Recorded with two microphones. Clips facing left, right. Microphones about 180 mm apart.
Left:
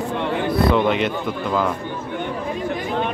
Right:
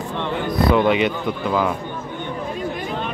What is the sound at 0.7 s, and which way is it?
Speech, centre (ahead or behind).